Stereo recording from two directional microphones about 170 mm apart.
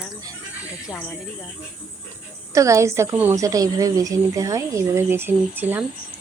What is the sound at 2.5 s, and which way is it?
A woman's voice, 15° right (ahead or behind).